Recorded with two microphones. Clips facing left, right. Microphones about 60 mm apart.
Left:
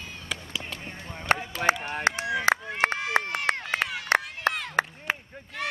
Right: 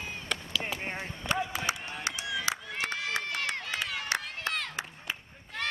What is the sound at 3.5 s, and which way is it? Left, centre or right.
Run, left.